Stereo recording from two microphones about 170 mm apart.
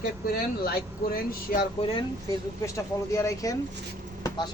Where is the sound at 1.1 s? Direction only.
60° left (ahead or behind).